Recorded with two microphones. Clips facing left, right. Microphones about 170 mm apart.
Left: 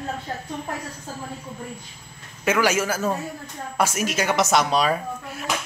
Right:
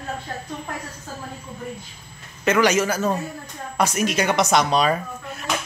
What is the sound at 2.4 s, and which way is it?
A woman's voice, 5° left (ahead or behind).